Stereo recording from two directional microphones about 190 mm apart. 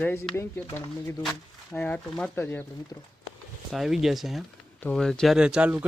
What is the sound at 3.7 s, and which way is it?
Speech, centre (ahead or behind).